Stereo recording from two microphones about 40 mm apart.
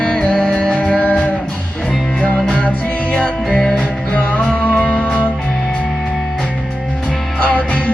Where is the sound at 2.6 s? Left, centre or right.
Left.